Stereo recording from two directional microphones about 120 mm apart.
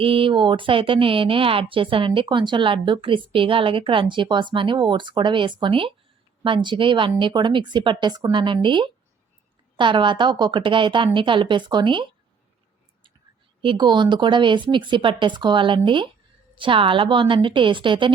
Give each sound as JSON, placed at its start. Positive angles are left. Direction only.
{"t": 0.0, "sound": "a woman's voice", "side_deg": -45}
{"t": 13.6, "sound": "a woman's voice", "side_deg": -40}